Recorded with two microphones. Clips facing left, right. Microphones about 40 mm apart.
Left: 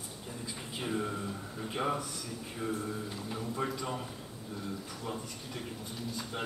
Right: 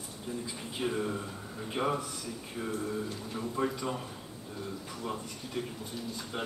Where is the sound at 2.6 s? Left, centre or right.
Centre.